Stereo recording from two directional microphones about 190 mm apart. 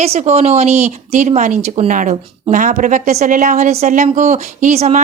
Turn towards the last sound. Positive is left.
turn(degrees=-35)  # may be behind; listen again after turning